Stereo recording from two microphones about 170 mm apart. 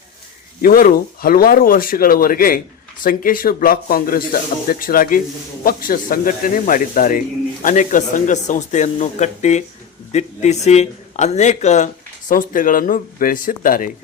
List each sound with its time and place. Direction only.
0.6 s speech: 55° left (ahead or behind)